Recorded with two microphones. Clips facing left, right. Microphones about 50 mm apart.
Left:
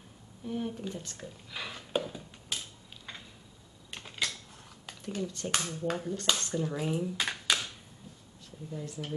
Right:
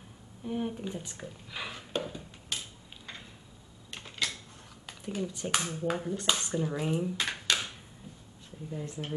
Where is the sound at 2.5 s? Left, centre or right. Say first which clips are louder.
Even; centre.